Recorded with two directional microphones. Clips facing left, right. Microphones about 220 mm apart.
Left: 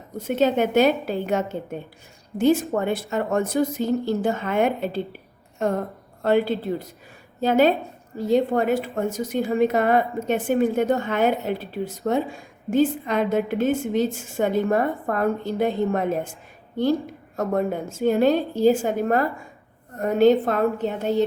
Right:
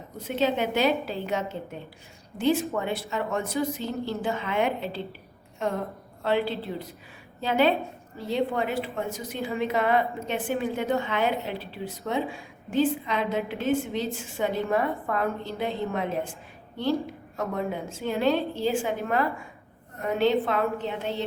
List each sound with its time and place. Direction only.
0.2 s a woman's voice: 45° left (ahead or behind)
17.3 s a woman's voice: 45° left (ahead or behind)